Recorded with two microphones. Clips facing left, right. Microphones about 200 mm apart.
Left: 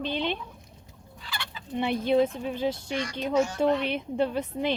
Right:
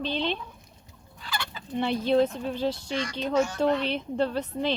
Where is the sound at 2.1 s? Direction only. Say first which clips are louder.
Even; 10° left (ahead or behind).